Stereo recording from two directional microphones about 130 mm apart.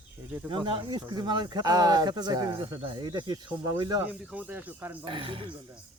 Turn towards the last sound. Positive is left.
turn(degrees=-45)  # may be behind; listen again after turning